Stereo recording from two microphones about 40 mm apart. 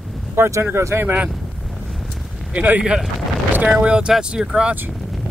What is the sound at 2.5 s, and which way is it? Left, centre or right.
Speech, right.